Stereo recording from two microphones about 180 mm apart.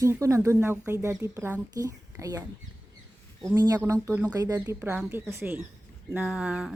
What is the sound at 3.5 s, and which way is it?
Speech, 20° right (ahead or behind).